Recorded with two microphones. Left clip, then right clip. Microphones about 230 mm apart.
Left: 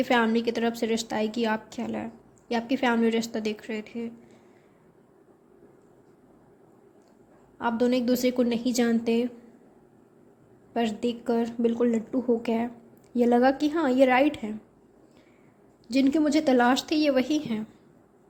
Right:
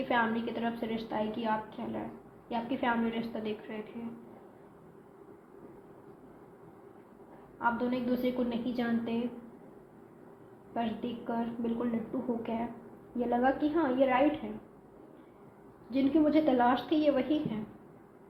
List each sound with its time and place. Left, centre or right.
0.1 s a woman's voice: left
7.6 s a woman's voice: left
10.8 s a woman's voice: left
15.9 s a woman's voice: left